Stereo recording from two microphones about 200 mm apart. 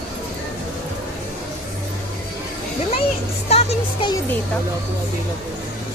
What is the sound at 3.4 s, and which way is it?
Music, 30° left (ahead or behind).